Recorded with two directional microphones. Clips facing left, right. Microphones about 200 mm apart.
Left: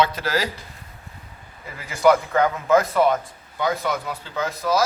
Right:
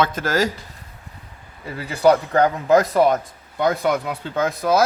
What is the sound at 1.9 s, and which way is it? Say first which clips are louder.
Speech: right 1 dB; 35° right (ahead or behind).